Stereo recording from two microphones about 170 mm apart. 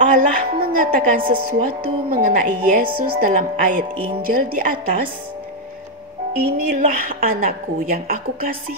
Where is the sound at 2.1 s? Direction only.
55° right (ahead or behind).